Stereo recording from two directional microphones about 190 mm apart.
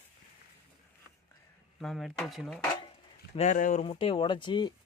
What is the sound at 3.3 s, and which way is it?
Speech, 40° left (ahead or behind).